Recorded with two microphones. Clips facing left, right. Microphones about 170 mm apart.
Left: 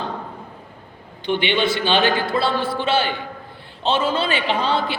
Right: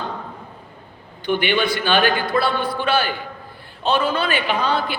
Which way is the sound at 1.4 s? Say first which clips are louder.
Left 2 dB; 25° left (ahead or behind).